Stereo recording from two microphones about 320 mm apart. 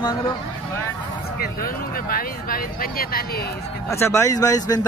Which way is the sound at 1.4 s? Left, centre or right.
Left.